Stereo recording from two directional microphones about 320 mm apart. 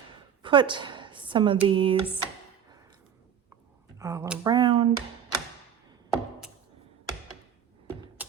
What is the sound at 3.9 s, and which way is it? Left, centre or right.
Speech, centre.